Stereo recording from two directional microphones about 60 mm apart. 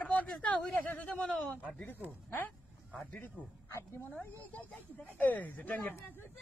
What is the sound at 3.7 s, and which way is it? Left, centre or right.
Speech, left.